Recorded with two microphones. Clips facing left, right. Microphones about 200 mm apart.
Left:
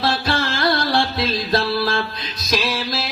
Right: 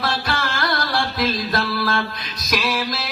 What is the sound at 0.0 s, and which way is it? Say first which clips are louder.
Music: left 3 dB; 25° left (ahead or behind).